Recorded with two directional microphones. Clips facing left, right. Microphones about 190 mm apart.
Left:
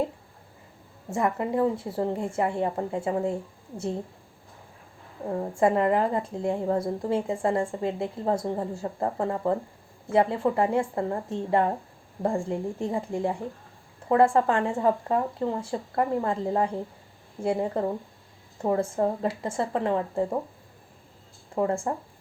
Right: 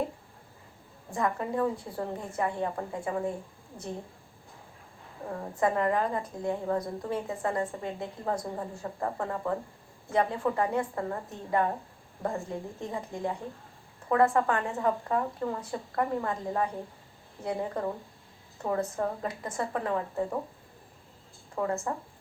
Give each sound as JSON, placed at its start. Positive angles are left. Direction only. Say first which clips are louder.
{"t": 1.1, "sound": "a woman's voice", "louder": "left 4 dB", "side_deg": 25}
{"t": 5.3, "sound": "a woman's voice", "louder": "left 5 dB", "side_deg": 25}
{"t": 21.5, "sound": "speech", "louder": "left 5 dB", "side_deg": 30}